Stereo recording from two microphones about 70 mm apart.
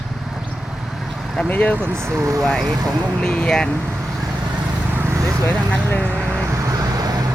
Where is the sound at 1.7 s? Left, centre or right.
Right.